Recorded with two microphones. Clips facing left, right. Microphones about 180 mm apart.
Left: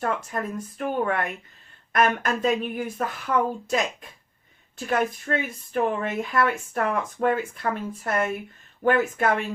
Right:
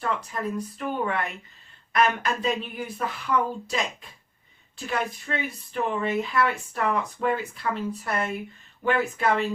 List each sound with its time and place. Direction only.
0.0 s speech: 45° left (ahead or behind)
4.9 s speech: 50° left (ahead or behind)